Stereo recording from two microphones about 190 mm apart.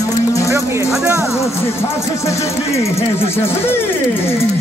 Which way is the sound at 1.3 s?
15° left (ahead or behind).